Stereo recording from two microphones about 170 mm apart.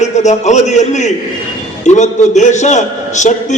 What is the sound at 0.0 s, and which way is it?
A man's voice, 45° left (ahead or behind).